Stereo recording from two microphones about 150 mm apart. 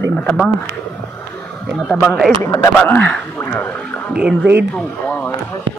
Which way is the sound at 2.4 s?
20° left (ahead or behind).